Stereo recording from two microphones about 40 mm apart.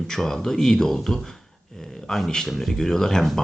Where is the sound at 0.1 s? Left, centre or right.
Centre.